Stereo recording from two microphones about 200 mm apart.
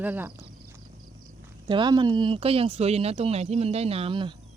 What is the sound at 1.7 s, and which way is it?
Speech, 20° right (ahead or behind).